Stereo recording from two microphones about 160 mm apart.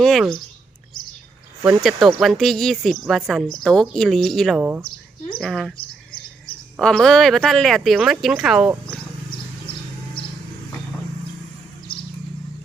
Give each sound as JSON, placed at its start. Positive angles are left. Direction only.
{"t": 0.0, "sound": "speech", "side_deg": 5}
{"t": 1.6, "sound": "speech", "side_deg": -5}
{"t": 6.7, "sound": "speech", "side_deg": 5}
{"t": 10.2, "sound": "insect", "side_deg": 35}